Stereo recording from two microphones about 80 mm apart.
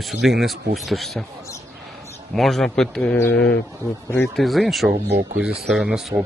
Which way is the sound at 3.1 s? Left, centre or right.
Left.